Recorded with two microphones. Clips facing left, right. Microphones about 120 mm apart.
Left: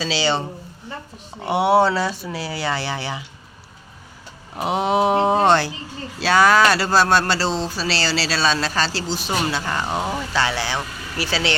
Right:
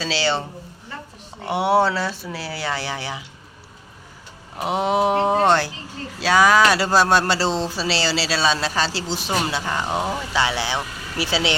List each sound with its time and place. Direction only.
0.0 s speech: centre (ahead or behind)
1.5 s speech: centre (ahead or behind)
4.5 s speech: centre (ahead or behind)
5.5 s speech: 5° right (ahead or behind); by 9.3 s 20° right (ahead or behind)
9.3 s speech: centre (ahead or behind)
9.6 s speech: 10° right (ahead or behind)
9.8 s speech: centre (ahead or behind)
10.3 s speech: 15° right (ahead or behind)